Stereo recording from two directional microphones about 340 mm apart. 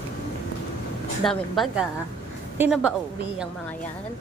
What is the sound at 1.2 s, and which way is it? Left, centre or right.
A woman's voice, centre.